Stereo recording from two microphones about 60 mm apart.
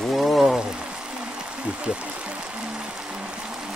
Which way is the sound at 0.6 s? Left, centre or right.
Centre.